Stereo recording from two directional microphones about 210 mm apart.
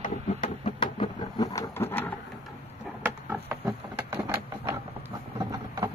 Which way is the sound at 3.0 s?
5° right (ahead or behind).